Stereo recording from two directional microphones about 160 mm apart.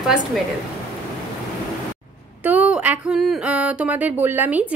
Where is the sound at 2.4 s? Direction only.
10° right (ahead or behind).